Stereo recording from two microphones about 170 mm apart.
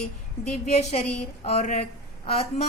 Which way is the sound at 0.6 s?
40° left (ahead or behind).